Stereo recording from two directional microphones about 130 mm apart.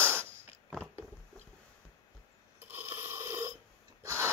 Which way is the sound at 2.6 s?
15° right (ahead or behind).